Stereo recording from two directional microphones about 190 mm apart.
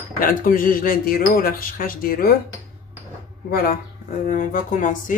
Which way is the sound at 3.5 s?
50° left (ahead or behind).